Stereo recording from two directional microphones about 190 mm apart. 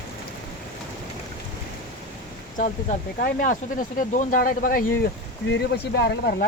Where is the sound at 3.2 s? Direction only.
45° left (ahead or behind).